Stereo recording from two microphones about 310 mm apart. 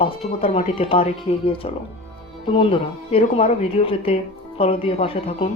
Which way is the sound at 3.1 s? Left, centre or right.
Centre.